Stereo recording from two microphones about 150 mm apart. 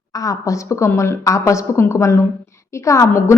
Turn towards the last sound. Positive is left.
turn(degrees=20)  # may be behind; listen again after turning